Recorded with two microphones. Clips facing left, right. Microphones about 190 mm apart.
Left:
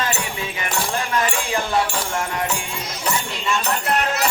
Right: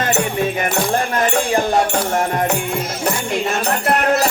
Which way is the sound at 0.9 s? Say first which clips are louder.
Right 4 dB; 55° right (ahead or behind).